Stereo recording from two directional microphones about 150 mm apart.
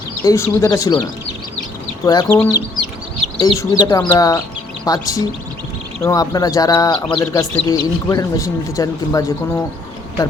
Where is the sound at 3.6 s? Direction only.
20° left (ahead or behind).